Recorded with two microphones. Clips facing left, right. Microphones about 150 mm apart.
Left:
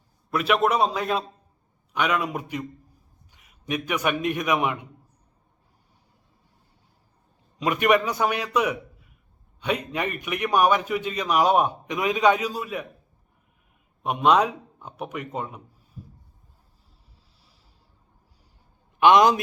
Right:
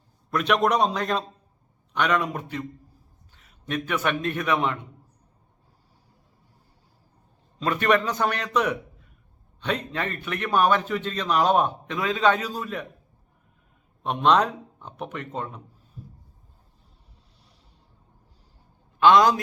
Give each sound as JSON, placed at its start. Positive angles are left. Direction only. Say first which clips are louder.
{"t": 0.3, "sound": "a man's voice", "louder": "even", "side_deg": 5}
{"t": 7.6, "sound": "a man's voice", "louder": "left 1 dB", "side_deg": 15}
{"t": 14.0, "sound": "a man's voice", "louder": "left 1 dB", "side_deg": 10}
{"t": 18.9, "sound": "a man's voice", "louder": "left 1 dB", "side_deg": 20}